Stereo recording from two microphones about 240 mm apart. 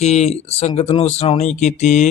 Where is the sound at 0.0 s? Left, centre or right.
Left.